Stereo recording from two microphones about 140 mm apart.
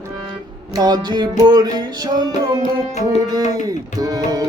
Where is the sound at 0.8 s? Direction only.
30° right (ahead or behind).